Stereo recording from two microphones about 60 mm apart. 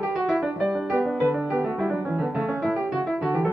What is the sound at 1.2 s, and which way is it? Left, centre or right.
Music, right.